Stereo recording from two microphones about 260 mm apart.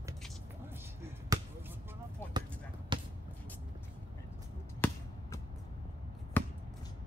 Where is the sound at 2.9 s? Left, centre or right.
Centre.